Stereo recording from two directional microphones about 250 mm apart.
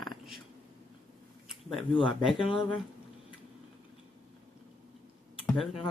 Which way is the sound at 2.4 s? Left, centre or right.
Centre.